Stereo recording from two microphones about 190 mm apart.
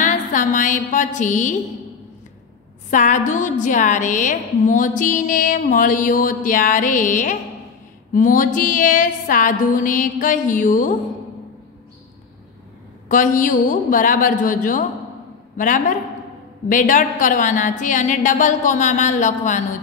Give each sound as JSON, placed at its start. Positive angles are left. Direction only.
{"t": 0.0, "sound": "a woman's voice", "side_deg": 40}
{"t": 2.9, "sound": "a woman's voice", "side_deg": 40}
{"t": 13.1, "sound": "a woman's voice", "side_deg": 45}